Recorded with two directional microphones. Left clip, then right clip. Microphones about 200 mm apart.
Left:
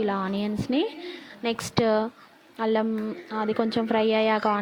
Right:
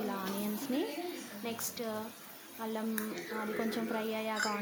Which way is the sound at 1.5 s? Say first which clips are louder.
Left 16 dB; 40° left (ahead or behind).